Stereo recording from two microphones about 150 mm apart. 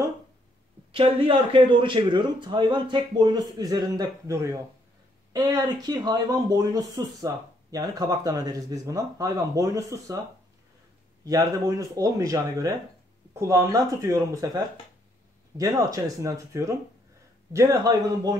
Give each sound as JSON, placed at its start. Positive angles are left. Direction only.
{"t": 0.9, "sound": "a man's voice", "side_deg": -35}
{"t": 11.2, "sound": "speech", "side_deg": -20}